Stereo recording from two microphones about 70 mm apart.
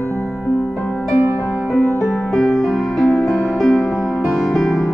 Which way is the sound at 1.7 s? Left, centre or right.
Centre.